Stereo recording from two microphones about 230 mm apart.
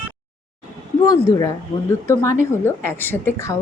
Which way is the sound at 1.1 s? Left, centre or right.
Centre.